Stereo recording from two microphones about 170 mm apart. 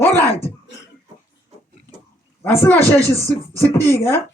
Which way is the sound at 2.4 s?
10° left (ahead or behind).